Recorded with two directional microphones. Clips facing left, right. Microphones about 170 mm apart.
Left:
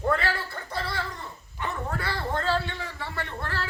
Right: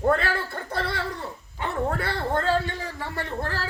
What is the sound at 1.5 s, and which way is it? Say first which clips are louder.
A man's voice: right 5 dB; 55° right (ahead or behind).